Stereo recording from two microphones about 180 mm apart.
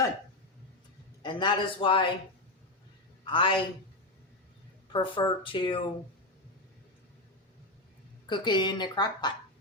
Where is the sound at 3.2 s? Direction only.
30° left (ahead or behind).